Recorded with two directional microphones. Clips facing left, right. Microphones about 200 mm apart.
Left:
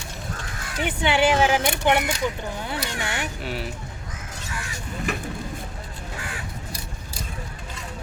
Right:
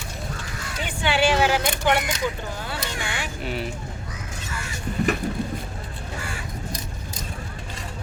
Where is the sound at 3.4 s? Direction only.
Centre (ahead or behind).